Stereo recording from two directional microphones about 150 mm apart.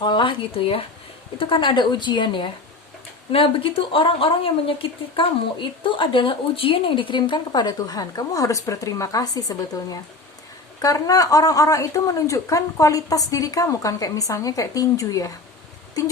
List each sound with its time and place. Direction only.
0.0 s a woman's voice: 30° left (ahead or behind)